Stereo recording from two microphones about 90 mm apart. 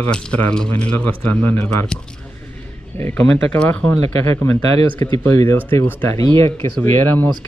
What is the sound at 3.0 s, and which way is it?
Speech, 20° left (ahead or behind).